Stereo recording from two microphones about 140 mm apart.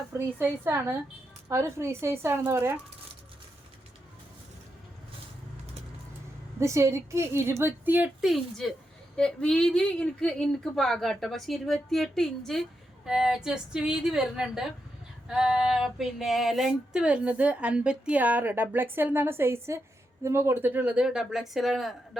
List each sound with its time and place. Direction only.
0.1 s a sound: 15° right (ahead or behind)
1.5 s a woman's voice: 20° right (ahead or behind)
6.6 s a woman's voice: 20° right (ahead or behind)
8.2 s speech: centre (ahead or behind)
15.3 s a sound: 5° right (ahead or behind)
20.2 s speech: 20° right (ahead or behind); by 21.9 s centre (ahead or behind)